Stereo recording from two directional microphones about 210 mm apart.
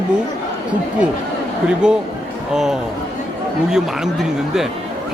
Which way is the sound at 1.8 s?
5° right (ahead or behind).